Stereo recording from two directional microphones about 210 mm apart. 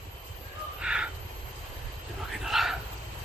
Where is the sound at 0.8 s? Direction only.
5° right (ahead or behind).